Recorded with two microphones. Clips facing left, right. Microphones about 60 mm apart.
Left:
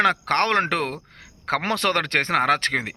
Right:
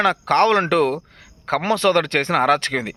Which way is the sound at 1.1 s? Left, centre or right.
Left.